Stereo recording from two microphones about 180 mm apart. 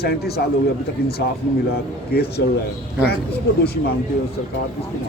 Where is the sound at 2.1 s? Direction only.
60° left (ahead or behind).